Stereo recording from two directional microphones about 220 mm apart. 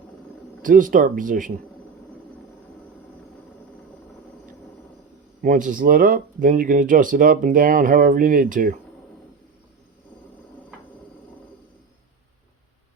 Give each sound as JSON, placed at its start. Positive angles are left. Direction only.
{"t": 0.6, "sound": "speech", "side_deg": -40}
{"t": 5.4, "sound": "speech", "side_deg": -35}